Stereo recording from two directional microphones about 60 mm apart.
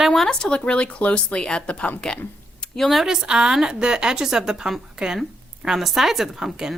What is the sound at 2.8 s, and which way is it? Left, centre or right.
A woman's voice, centre.